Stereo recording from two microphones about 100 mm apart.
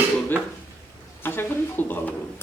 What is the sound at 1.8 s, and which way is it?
Speech, 20° left (ahead or behind).